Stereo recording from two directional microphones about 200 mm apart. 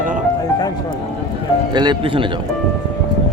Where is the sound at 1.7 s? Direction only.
20° right (ahead or behind).